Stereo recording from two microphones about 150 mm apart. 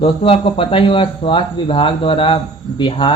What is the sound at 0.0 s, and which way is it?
Speech, 40° left (ahead or behind).